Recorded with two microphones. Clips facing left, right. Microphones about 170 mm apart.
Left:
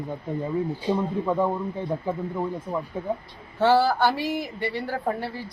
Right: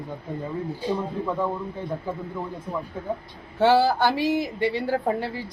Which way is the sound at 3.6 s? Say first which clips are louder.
Right 1 dB; 15° right (ahead or behind).